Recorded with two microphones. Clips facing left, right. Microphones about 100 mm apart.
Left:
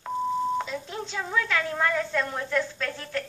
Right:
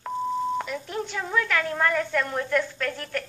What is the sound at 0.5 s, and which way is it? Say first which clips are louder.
Speech: right 1 dB; 20° left (ahead or behind).